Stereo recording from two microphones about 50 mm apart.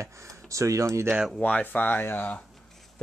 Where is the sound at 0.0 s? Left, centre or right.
Right.